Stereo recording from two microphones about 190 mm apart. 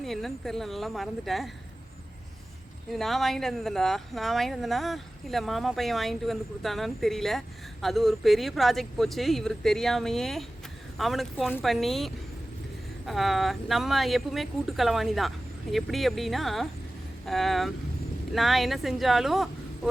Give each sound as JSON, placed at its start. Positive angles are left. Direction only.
{"t": 0.0, "sound": "speech", "side_deg": 0}
{"t": 2.9, "sound": "speech", "side_deg": 0}